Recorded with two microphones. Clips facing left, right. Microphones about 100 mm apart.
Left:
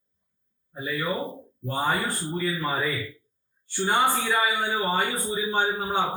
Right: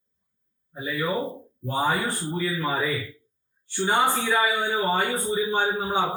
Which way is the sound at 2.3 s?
Centre (ahead or behind).